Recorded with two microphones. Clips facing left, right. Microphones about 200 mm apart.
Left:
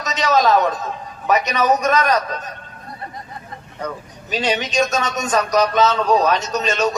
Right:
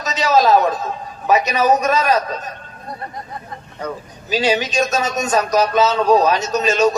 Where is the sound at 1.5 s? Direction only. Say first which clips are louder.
Right 2 dB; 5° right (ahead or behind).